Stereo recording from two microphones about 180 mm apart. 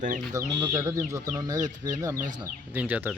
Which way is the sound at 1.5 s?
45° right (ahead or behind).